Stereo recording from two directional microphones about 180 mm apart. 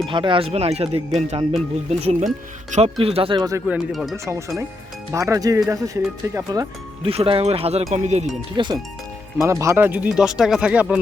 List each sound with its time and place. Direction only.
0.1 s speech: 25° right (ahead or behind)
3.7 s speech: centre (ahead or behind)
4.3 s speech: 15° right (ahead or behind)
7.1 s speech: 30° right (ahead or behind)
8.5 s speech: 25° right (ahead or behind); by 11.0 s 5° right (ahead or behind)